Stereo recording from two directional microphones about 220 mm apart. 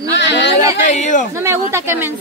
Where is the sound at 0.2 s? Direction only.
55° left (ahead or behind).